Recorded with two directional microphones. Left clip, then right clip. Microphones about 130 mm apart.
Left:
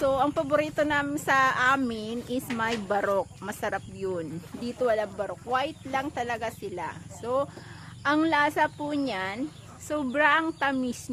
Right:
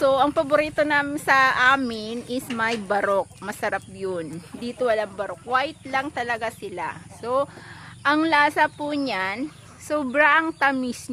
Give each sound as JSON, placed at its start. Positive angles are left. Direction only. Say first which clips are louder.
{"t": 0.0, "sound": "speech", "louder": "right 6 dB", "side_deg": -30}